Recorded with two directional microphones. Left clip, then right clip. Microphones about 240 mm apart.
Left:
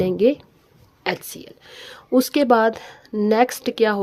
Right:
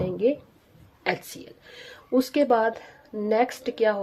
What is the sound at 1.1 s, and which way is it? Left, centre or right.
A woman's voice, left.